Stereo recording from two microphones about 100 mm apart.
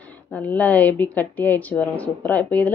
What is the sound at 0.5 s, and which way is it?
Speech, 15° left (ahead or behind).